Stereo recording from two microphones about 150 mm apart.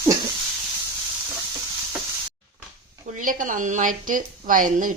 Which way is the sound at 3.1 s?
60° right (ahead or behind).